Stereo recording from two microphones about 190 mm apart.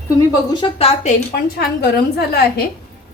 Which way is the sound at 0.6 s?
30° left (ahead or behind).